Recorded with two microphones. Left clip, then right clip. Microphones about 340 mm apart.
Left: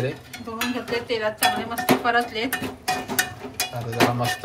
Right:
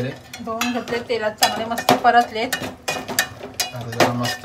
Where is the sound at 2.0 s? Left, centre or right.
Right.